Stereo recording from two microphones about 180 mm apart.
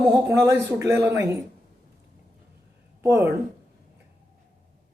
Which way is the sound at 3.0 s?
15° right (ahead or behind).